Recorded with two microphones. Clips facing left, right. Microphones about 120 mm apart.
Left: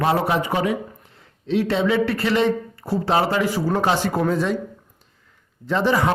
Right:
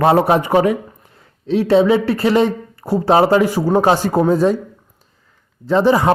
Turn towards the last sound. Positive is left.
turn(degrees=-35)  # may be behind; listen again after turning